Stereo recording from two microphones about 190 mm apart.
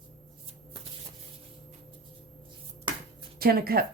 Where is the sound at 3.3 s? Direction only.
50° right (ahead or behind).